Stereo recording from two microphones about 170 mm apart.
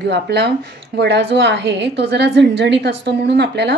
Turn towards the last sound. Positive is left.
turn(degrees=-80)